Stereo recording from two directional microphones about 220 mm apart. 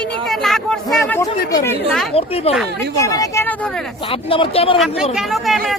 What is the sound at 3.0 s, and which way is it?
Speech, 15° left (ahead or behind).